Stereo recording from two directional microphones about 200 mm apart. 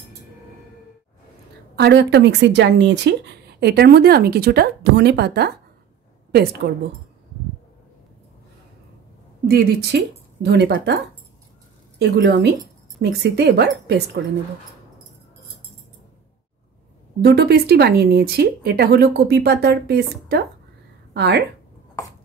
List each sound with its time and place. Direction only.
1.8 s speech: 60° right (ahead or behind)
9.5 s speech: 55° right (ahead or behind)
17.2 s speech: 50° right (ahead or behind)